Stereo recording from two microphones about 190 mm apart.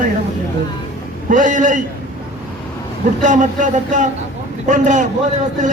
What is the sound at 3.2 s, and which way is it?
A man's voice, 40° right (ahead or behind).